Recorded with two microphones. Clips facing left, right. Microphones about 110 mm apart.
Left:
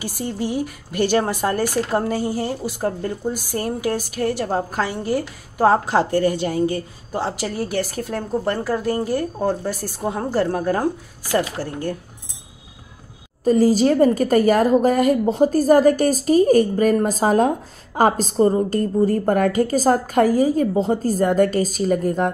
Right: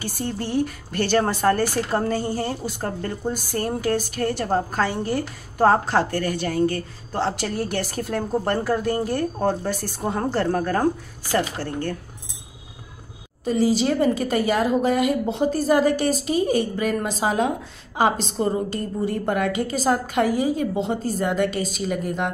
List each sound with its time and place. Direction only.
0.0 s speech: 10° left (ahead or behind)
13.4 s a woman's voice: 45° left (ahead or behind)